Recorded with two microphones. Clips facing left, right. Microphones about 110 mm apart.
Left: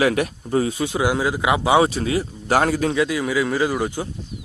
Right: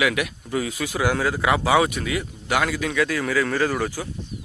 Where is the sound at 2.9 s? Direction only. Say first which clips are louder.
Left 2 dB; 15° left (ahead or behind).